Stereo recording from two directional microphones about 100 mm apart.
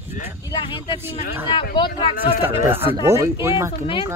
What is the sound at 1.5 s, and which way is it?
Speech, 55° left (ahead or behind).